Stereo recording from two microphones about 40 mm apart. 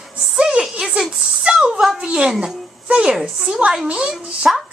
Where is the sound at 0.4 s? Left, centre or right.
Right.